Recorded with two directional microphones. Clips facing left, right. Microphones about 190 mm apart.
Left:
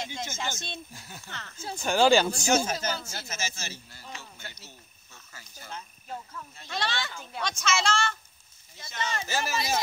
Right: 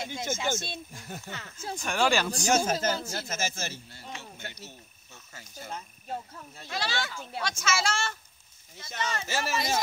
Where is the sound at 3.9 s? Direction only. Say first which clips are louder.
Right 2 dB; 25° right (ahead or behind).